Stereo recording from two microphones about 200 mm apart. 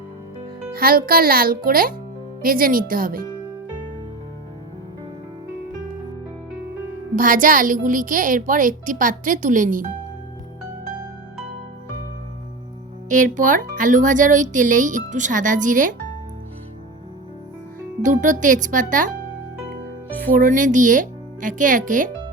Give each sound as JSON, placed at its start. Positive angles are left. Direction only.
{"t": 0.7, "sound": "a child's voice", "side_deg": -50}
{"t": 7.2, "sound": "speech", "side_deg": -45}
{"t": 13.1, "sound": "speech", "side_deg": -40}
{"t": 18.0, "sound": "speech", "side_deg": -40}
{"t": 20.2, "sound": "speech", "side_deg": -40}